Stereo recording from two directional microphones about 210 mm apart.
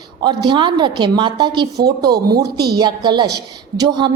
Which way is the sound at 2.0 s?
50° right (ahead or behind).